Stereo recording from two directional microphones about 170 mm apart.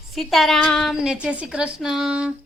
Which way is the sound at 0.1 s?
Centre (ahead or behind).